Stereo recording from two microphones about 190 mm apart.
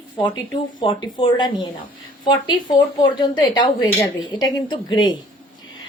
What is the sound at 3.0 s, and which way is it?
A woman's voice, 25° left (ahead or behind).